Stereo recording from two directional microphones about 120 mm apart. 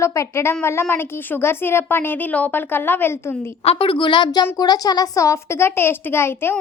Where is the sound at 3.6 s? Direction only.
55° left (ahead or behind); by 6.5 s 20° left (ahead or behind).